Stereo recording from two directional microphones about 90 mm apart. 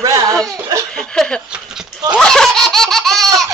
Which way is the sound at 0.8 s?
10° left (ahead or behind).